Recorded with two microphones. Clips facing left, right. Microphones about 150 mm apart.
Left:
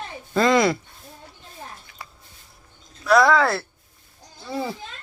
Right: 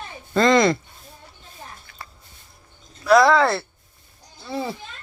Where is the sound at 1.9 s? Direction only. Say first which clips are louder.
Even; 15° left (ahead or behind).